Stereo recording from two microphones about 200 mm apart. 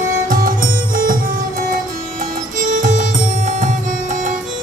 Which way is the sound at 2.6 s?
40° right (ahead or behind).